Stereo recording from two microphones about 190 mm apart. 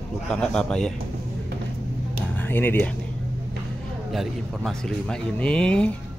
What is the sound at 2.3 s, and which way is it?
Speech, 10° left (ahead or behind).